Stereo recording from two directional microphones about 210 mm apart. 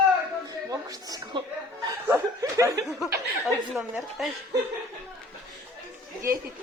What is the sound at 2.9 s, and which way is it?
Speech, centre (ahead or behind).